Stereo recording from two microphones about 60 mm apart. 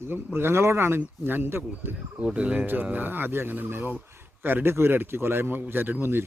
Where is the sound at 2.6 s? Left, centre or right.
Right.